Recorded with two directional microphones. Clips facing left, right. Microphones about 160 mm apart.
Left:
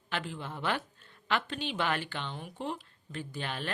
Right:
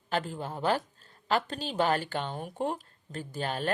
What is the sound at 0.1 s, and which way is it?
A woman's voice, 40° right (ahead or behind).